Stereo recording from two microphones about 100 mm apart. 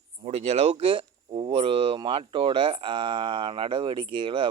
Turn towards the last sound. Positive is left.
turn(degrees=-60)  # may be behind; listen again after turning